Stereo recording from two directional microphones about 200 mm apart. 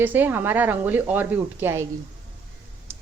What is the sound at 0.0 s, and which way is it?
Speech, 10° right (ahead or behind).